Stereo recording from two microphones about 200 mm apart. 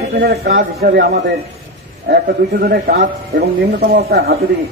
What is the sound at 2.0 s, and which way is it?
A man's voice, 50° right (ahead or behind).